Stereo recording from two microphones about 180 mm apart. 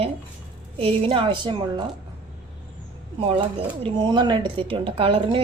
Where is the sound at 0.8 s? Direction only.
30° right (ahead or behind).